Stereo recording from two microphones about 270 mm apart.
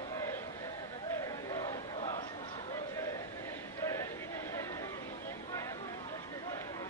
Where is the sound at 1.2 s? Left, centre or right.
Centre.